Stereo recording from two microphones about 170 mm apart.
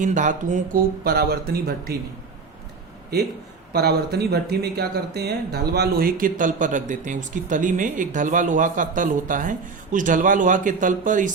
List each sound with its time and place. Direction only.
0.0 s speech: 45° right (ahead or behind); by 2.0 s 65° right (ahead or behind)
3.7 s speech: 70° right (ahead or behind); by 11.3 s 50° right (ahead or behind)